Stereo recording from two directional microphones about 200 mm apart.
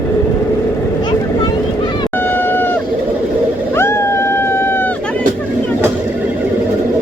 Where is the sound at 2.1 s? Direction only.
10° left (ahead or behind).